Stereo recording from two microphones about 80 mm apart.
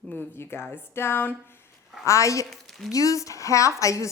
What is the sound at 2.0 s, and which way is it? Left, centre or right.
A woman's voice, left.